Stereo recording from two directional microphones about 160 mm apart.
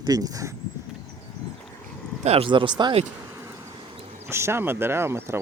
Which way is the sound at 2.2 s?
35° right (ahead or behind).